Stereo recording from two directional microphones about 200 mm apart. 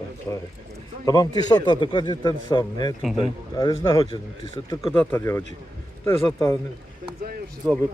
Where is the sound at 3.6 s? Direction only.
20° left (ahead or behind).